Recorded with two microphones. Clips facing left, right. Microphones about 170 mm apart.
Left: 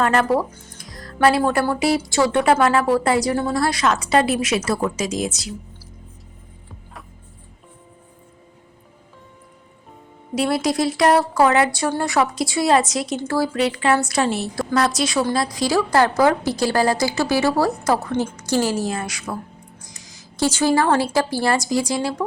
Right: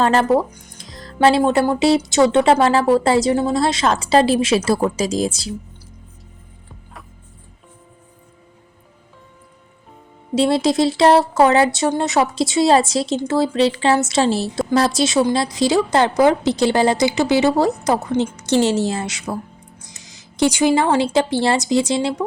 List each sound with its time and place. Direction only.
0.0 s speech: 30° right (ahead or behind)
10.3 s speech: 25° right (ahead or behind)